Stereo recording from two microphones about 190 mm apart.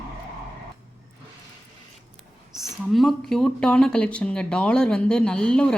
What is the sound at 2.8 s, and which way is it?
Speech, centre (ahead or behind).